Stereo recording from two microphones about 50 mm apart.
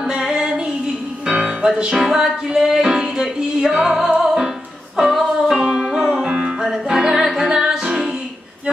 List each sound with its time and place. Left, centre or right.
0.0 s music: centre